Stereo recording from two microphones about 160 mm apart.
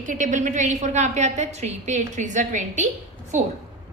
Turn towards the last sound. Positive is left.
turn(degrees=-50)  # may be behind; listen again after turning